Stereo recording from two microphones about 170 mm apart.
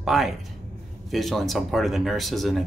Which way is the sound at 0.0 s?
Centre (ahead or behind).